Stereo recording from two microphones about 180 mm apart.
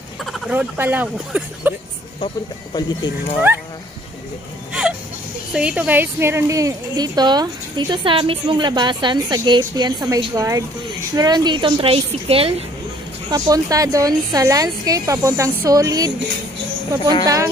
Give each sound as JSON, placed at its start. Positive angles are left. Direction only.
{"t": 0.2, "sound": "speech", "side_deg": -5}
{"t": 2.1, "sound": "speech", "side_deg": 30}
{"t": 5.5, "sound": "a woman's voice", "side_deg": -5}
{"t": 13.3, "sound": "a woman's voice", "side_deg": -20}
{"t": 17.2, "sound": "a woman's voice", "side_deg": -20}